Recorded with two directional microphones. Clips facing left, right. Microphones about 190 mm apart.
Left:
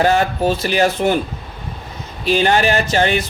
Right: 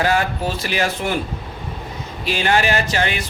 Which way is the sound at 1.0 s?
40° left (ahead or behind).